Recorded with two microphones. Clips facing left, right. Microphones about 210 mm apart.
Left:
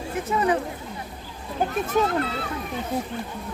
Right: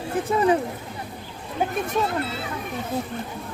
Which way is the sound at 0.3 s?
30° right (ahead or behind).